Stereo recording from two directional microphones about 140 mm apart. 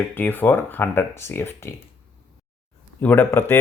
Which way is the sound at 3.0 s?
10° left (ahead or behind).